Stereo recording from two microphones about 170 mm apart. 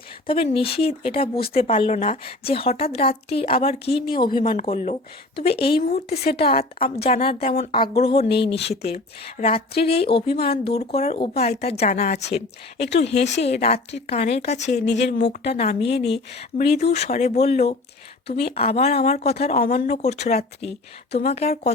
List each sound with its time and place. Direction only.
0.3 s a woman's voice: 30° left (ahead or behind)
4.6 s a woman's voice: 40° left (ahead or behind)
14.8 s speech: 90° left
15.4 s a woman's voice: 35° left (ahead or behind)
19.6 s speech: 55° left (ahead or behind)
20.0 s a woman's voice: 40° left (ahead or behind)